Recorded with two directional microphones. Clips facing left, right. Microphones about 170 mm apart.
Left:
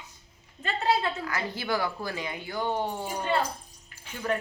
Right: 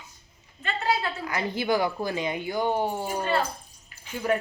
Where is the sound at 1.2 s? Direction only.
20° right (ahead or behind).